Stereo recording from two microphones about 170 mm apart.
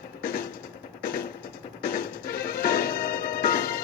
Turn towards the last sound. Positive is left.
turn(degrees=55)  # may be behind; listen again after turning